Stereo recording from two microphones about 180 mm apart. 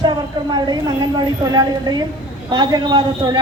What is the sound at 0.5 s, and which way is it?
A woman's voice, 25° right (ahead or behind).